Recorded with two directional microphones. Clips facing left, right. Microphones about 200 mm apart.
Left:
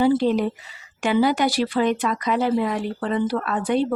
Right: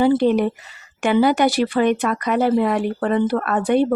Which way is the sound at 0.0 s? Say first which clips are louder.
Right 3 dB; 60° right (ahead or behind).